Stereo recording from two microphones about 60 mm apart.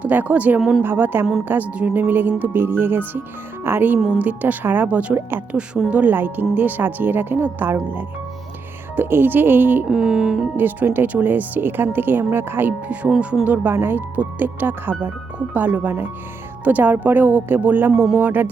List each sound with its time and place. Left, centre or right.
0.0 s speech: right
4.2 s speech: right
5.9 s speech: right
9.0 s speech: right
9.8 s speech: centre
10.6 s speech: right
12.9 s speech: right
13.7 s speech: right